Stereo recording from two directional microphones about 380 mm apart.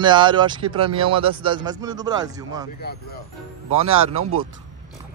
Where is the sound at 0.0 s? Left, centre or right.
Centre.